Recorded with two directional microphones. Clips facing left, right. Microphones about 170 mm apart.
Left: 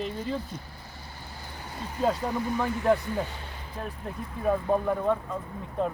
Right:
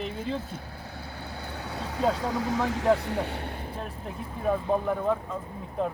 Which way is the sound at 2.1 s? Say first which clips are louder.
Right 1 dB; 90° right.